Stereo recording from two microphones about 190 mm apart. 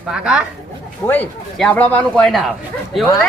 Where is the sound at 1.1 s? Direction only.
10° left (ahead or behind).